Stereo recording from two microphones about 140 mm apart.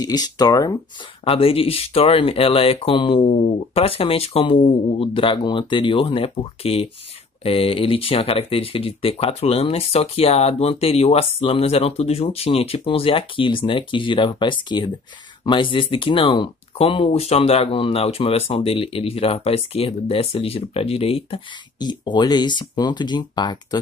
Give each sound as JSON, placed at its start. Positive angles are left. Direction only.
{"t": 0.0, "sound": "speech", "side_deg": 30}
{"t": 1.2, "sound": "speech", "side_deg": 40}
{"t": 21.7, "sound": "speech", "side_deg": 30}